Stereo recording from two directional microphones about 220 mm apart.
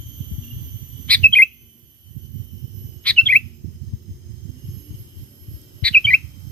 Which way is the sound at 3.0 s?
5° left (ahead or behind).